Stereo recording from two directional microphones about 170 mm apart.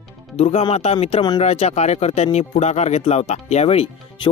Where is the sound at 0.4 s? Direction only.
35° left (ahead or behind).